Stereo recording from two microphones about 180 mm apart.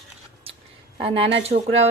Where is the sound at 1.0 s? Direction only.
30° right (ahead or behind).